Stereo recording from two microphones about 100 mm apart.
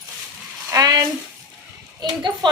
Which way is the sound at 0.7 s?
40° right (ahead or behind).